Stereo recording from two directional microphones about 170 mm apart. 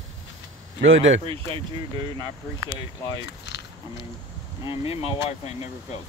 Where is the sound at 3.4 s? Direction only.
90° left.